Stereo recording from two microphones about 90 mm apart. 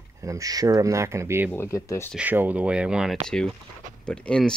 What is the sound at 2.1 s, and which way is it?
Speech, 20° right (ahead or behind).